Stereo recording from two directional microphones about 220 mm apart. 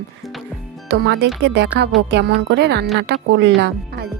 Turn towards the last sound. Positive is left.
turn(degrees=-50)  # may be behind; listen again after turning